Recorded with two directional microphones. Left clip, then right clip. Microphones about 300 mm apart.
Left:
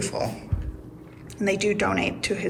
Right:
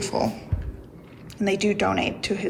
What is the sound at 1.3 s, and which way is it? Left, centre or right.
Speech, centre.